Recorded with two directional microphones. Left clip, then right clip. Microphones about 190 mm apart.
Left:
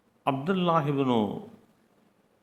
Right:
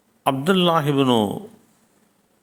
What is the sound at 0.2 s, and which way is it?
A man's voice, 40° right (ahead or behind).